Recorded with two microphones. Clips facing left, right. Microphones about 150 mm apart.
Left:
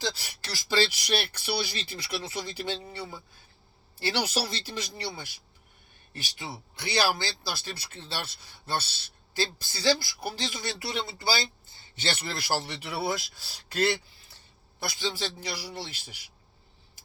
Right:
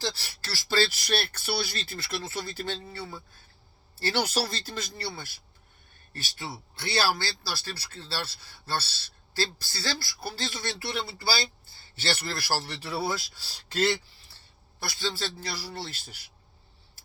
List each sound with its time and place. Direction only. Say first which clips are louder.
0.0 s speech: even; 15° left (ahead or behind)
4.0 s speech: right 1 dB; 10° left (ahead or behind)
14.8 s speech: even; 15° left (ahead or behind)